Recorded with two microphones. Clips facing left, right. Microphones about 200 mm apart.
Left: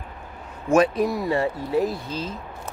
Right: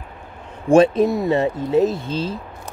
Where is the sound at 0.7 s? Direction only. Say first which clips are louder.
Right 5 dB; 25° right (ahead or behind).